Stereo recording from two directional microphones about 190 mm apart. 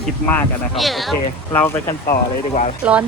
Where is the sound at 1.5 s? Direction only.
10° left (ahead or behind).